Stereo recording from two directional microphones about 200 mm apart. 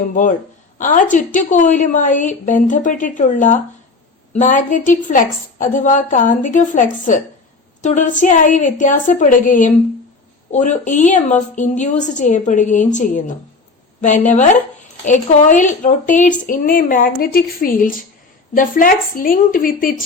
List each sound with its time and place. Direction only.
0.0 s a woman's voice: 40° left (ahead or behind)